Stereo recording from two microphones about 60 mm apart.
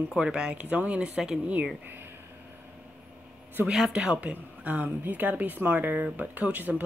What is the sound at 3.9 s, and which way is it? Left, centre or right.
Speech, centre.